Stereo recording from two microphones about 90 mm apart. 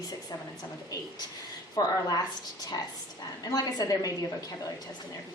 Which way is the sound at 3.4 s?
45° left (ahead or behind).